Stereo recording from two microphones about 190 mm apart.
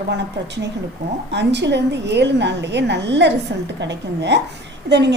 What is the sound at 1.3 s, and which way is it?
A woman's voice, 65° right (ahead or behind).